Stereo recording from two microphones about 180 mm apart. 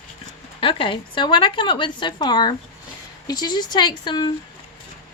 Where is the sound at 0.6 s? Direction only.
30° left (ahead or behind).